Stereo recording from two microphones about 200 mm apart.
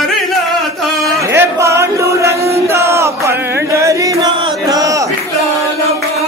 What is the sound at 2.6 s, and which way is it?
Chant, 15° right (ahead or behind).